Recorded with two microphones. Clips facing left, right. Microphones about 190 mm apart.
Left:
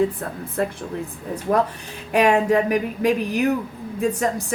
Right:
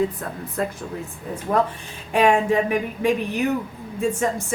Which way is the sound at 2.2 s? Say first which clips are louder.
Even; 40° left (ahead or behind).